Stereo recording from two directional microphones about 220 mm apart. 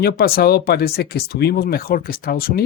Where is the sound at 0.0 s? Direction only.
45° left (ahead or behind).